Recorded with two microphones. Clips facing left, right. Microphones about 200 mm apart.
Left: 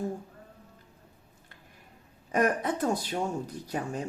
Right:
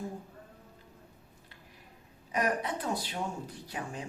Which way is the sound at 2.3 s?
50° left (ahead or behind).